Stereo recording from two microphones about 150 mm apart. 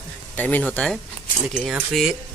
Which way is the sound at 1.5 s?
5° right (ahead or behind).